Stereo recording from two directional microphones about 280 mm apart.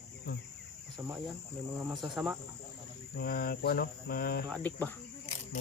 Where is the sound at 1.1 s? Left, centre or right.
Centre.